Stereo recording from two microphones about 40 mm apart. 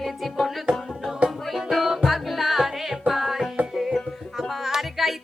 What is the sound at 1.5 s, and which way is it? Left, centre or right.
Music, centre.